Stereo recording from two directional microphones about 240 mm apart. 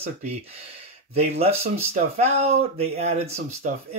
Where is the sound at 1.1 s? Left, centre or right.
Right.